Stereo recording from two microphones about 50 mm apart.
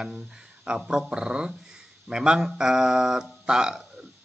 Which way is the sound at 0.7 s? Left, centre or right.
Centre.